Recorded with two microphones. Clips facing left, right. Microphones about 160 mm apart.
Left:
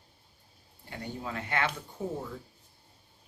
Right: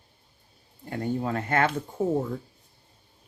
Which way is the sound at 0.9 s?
45° right (ahead or behind).